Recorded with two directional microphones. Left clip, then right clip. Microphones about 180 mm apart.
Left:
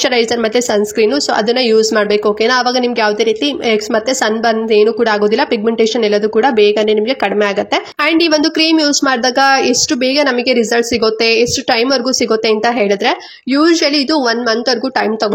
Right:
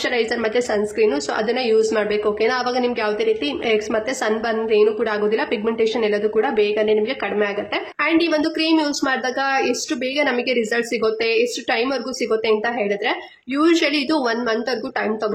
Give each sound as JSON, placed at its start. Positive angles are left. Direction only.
{"t": 0.7, "sound": "a woman's voice", "side_deg": 35}
{"t": 4.5, "sound": "a woman's voice", "side_deg": 35}